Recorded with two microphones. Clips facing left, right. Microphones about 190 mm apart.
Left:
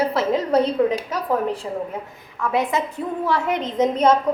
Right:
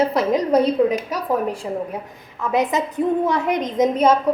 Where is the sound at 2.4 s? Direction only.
20° right (ahead or behind).